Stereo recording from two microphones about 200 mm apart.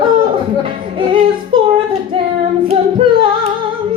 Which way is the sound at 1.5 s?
25° right (ahead or behind).